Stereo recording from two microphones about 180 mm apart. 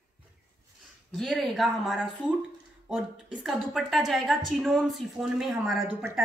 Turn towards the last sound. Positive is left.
turn(degrees=0)  # may be behind; listen again after turning